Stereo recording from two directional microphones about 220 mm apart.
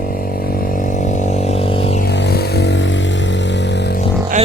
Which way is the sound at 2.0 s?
50° left (ahead or behind).